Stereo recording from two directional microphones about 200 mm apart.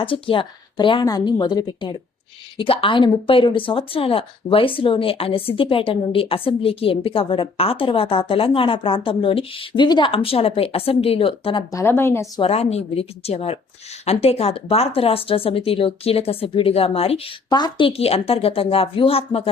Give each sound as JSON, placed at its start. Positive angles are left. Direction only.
{"t": 0.0, "sound": "speech", "side_deg": 25}
{"t": 11.7, "sound": "a woman's voice", "side_deg": 15}
{"t": 12.4, "sound": "speech", "side_deg": 30}